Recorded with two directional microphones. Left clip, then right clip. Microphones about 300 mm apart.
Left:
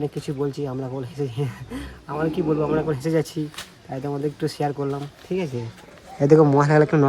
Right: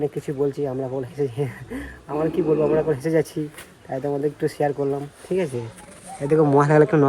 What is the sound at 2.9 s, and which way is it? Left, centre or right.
Speech, centre.